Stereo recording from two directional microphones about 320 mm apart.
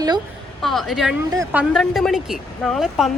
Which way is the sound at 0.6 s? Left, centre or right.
Centre.